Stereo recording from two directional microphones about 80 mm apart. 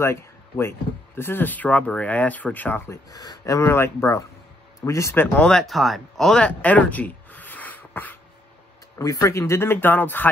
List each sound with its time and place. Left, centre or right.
0.0 s speech: left
2.9 s speech: left
3.5 s speech: left
5.4 s speech: centre
6.3 s a sound: centre
8.9 s speech: left